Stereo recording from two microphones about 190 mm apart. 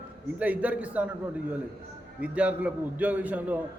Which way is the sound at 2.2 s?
5° right (ahead or behind).